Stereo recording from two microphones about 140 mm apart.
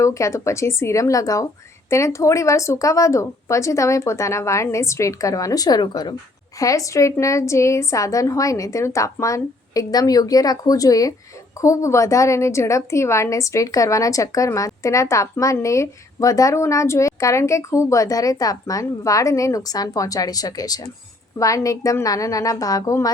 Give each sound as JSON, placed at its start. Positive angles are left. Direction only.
{"t": 0.0, "sound": "a woman's voice", "side_deg": 20}